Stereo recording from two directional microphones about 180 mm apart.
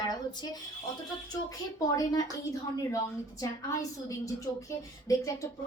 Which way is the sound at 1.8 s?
20° left (ahead or behind).